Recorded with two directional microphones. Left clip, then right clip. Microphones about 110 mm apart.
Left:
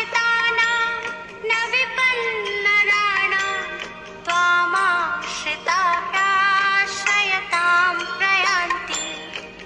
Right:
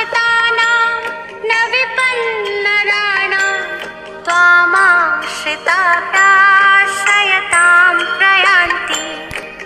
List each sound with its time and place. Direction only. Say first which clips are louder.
0.0 s music: right 6 dB; 55° right (ahead or behind)
1.5 s a sound: right 7 dB; 60° right (ahead or behind)
4.3 s music: right 9 dB; 60° right (ahead or behind)